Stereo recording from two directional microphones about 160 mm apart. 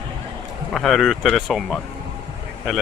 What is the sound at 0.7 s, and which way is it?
Speech, centre (ahead or behind).